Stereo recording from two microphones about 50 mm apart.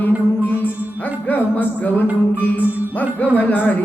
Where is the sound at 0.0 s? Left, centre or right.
Left.